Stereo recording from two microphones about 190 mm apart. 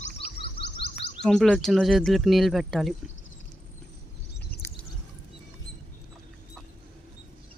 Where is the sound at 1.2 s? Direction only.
5° left (ahead or behind).